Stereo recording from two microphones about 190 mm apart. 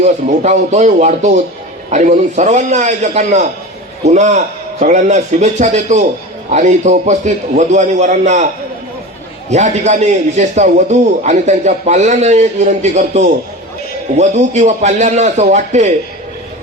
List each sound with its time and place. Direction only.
0.0 s a man's voice: 35° right (ahead or behind)
9.5 s a man's voice: 40° right (ahead or behind)